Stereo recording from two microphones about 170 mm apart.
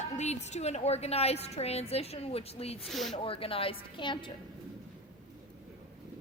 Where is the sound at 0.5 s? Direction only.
40° left (ahead or behind).